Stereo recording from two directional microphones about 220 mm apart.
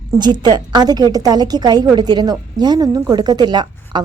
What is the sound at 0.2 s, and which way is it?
A woman's voice, 20° right (ahead or behind).